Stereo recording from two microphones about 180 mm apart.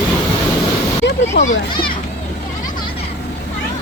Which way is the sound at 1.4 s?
70° left (ahead or behind).